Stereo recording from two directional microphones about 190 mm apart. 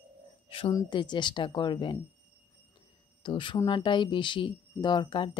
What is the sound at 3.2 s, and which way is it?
Speech, 25° left (ahead or behind).